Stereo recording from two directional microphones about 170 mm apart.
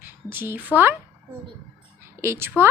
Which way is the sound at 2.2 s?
15° right (ahead or behind).